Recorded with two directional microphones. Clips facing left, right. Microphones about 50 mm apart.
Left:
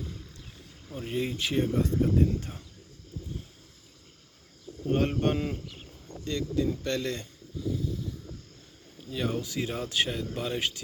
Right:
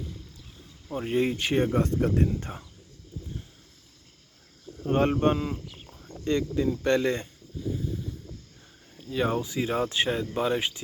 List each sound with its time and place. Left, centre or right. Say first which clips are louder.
0.9 s speech: right 6 dB; right
1.5 s speech: right 3 dB; right
1.8 s speech: right 1 dB; right
2.5 s speech: right 4 dB; right
4.9 s speech: right 4 dB; right
5.4 s speech: right 1 dB; centre
6.2 s speech: right 3 dB; right
9.2 s speech: right 4 dB; centre
9.8 s speech: right 3 dB; right